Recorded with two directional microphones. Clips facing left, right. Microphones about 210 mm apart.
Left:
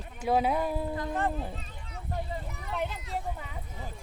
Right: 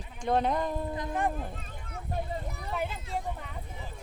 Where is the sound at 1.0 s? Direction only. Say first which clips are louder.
Even; 15° right (ahead or behind).